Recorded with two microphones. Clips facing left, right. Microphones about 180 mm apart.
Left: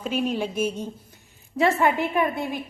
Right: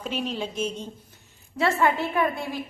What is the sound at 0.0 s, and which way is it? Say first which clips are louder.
A woman's voice: left 4 dB; 5° left (ahead or behind).